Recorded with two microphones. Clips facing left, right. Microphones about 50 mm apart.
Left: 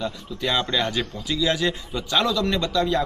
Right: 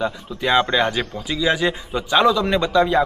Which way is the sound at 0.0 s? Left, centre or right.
Right.